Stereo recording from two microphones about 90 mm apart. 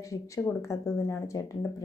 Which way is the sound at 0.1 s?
35° left (ahead or behind).